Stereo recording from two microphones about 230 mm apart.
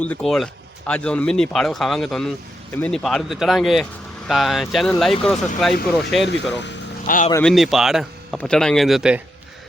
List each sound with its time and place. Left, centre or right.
0.0 s speech: centre
6.6 s vehicle: left
7.4 s speech: centre